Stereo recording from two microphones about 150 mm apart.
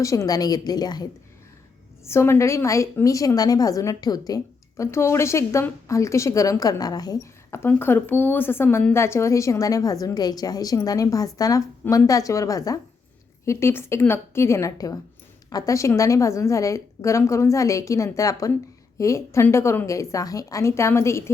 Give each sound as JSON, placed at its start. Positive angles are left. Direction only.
{"t": 0.0, "sound": "speech", "side_deg": 20}
{"t": 2.0, "sound": "speech", "side_deg": 15}